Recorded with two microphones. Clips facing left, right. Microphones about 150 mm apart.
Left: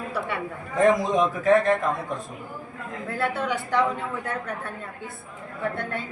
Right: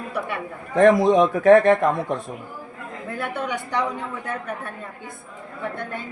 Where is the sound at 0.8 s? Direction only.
65° right (ahead or behind).